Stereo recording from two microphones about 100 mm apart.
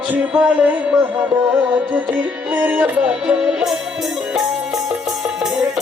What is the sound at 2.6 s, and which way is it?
Music, 15° right (ahead or behind).